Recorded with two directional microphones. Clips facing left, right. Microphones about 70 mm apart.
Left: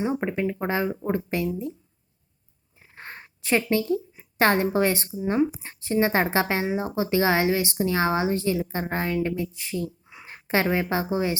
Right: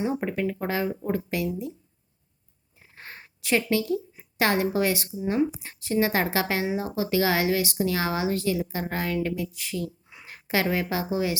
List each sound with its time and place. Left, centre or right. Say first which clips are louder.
0.2 s a woman's voice: left 1 dB; left
2.9 s a woman's voice: left 3 dB; left
5.2 s a woman's voice: left 2 dB; left